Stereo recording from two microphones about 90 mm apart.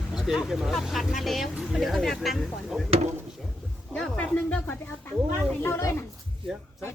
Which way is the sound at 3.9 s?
10° left (ahead or behind).